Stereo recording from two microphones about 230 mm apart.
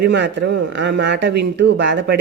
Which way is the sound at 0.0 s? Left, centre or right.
Right.